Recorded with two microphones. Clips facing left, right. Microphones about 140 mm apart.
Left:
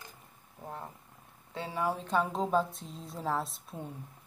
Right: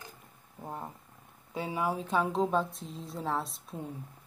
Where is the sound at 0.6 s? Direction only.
15° right (ahead or behind); by 3.9 s centre (ahead or behind).